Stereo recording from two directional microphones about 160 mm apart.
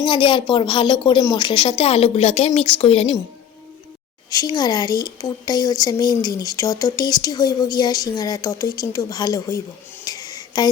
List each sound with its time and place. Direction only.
0.0 s speech: 30° left (ahead or behind)
4.3 s speech: 25° left (ahead or behind)